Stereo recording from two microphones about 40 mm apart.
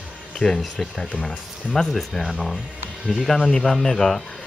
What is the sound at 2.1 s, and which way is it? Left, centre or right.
Speech, centre.